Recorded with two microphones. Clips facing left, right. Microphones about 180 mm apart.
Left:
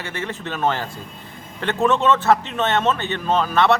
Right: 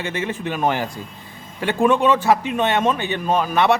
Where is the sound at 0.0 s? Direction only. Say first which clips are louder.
Right 4 dB; 15° right (ahead or behind).